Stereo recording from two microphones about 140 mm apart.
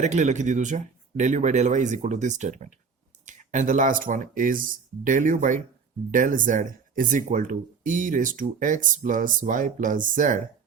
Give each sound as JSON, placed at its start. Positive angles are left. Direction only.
{"t": 0.0, "sound": "speech", "side_deg": -60}